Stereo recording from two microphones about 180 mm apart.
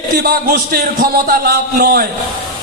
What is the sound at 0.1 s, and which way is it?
A man's voice, 55° right (ahead or behind).